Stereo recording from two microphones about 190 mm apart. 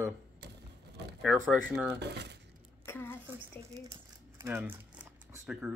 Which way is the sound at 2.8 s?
10° left (ahead or behind).